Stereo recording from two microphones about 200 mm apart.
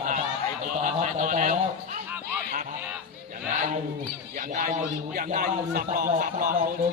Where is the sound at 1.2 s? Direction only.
40° right (ahead or behind).